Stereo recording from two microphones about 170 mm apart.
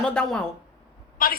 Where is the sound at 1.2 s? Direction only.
55° left (ahead or behind).